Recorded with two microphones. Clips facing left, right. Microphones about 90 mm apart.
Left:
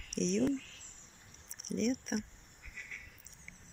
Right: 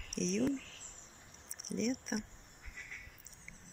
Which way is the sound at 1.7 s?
10° right (ahead or behind).